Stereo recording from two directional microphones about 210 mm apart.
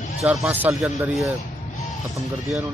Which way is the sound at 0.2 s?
Centre (ahead or behind).